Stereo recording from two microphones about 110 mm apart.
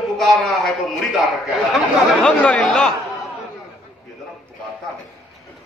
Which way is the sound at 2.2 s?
10° left (ahead or behind).